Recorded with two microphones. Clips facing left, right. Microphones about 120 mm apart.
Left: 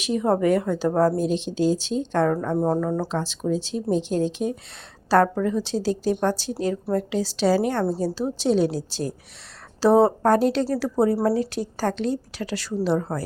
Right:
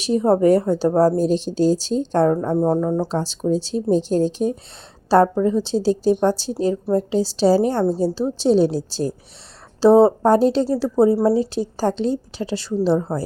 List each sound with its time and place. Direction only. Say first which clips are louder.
0.0 s a woman's voice: right 5 dB; 35° right (ahead or behind)
3.1 s a woman's voice: right 4 dB; 35° right (ahead or behind)